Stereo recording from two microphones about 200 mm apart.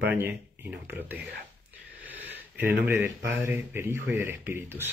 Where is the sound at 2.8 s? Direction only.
10° right (ahead or behind).